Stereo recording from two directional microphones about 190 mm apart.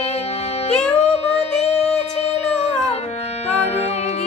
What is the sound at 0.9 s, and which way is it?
Music, 35° left (ahead or behind).